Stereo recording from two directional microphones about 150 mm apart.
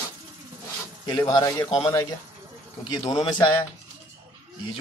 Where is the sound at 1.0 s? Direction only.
30° left (ahead or behind).